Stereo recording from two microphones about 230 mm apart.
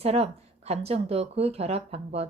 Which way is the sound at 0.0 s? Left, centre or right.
Right.